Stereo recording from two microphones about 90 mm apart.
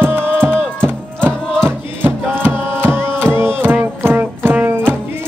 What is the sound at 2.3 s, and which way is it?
Music, 25° right (ahead or behind).